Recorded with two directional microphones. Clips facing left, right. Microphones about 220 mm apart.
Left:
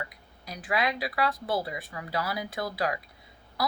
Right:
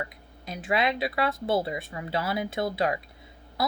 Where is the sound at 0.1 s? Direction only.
25° right (ahead or behind).